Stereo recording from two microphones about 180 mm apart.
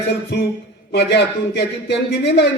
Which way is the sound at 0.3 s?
75° left (ahead or behind).